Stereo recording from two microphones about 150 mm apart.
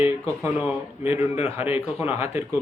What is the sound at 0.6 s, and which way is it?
Speech, 10° right (ahead or behind).